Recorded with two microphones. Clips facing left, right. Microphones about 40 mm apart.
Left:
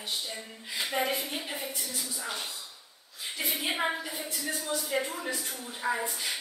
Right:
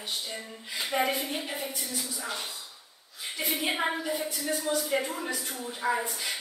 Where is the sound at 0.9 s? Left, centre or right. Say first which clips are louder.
Right 3 dB; right.